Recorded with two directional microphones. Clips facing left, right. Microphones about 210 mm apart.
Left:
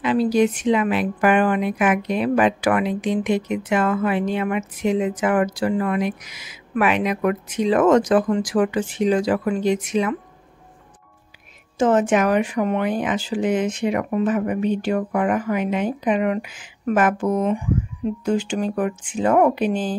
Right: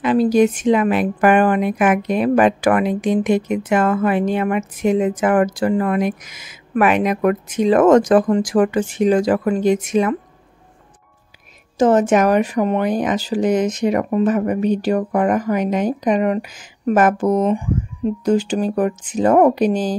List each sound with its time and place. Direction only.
0.0 s a woman's voice: 45° right (ahead or behind)
11.8 s speech: 40° right (ahead or behind)